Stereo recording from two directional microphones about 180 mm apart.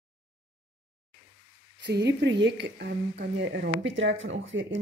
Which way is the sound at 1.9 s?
70° right (ahead or behind).